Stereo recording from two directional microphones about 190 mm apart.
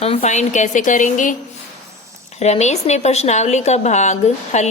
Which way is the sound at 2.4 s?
35° left (ahead or behind).